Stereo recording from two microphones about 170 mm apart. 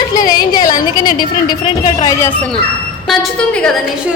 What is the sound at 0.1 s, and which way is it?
A woman's voice, 20° left (ahead or behind).